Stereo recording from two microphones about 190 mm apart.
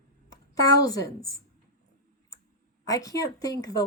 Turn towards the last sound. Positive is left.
turn(degrees=20)  # may be behind; listen again after turning